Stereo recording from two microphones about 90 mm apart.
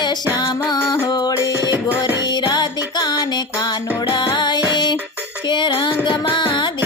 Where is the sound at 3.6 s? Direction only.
55° left (ahead or behind).